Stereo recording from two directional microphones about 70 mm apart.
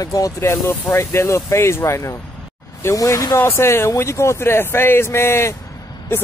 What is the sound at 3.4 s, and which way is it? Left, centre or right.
Speech, left.